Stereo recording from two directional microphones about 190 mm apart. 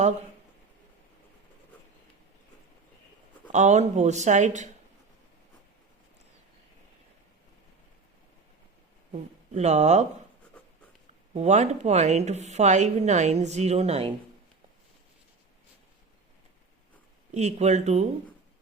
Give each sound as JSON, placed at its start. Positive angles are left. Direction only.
{"t": 3.5, "sound": "a woman's voice", "side_deg": -40}
{"t": 9.6, "sound": "a woman's voice", "side_deg": -35}
{"t": 11.3, "sound": "a woman's voice", "side_deg": -35}
{"t": 17.3, "sound": "a woman's voice", "side_deg": -35}